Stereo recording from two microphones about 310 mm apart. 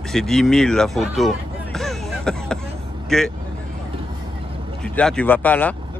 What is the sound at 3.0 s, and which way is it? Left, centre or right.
Speech, centre.